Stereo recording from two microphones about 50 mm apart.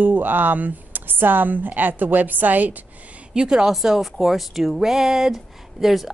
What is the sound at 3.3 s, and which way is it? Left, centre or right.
Speech, centre.